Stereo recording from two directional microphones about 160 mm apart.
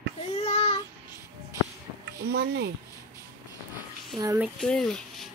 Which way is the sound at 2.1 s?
85° right.